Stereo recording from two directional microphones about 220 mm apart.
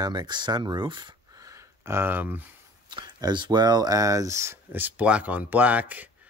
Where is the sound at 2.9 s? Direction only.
20° right (ahead or behind).